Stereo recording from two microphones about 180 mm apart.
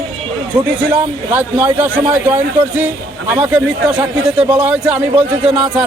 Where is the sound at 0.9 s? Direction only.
10° right (ahead or behind).